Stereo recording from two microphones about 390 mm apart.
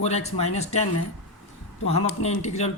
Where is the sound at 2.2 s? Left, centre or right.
Centre.